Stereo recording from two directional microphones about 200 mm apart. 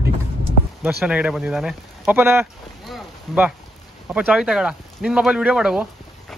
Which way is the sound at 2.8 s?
Centre (ahead or behind).